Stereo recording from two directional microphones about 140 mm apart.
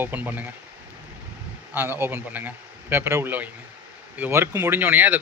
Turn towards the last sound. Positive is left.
turn(degrees=-10)  # may be behind; listen again after turning